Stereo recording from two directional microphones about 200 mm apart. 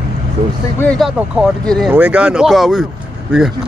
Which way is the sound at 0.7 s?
5° left (ahead or behind).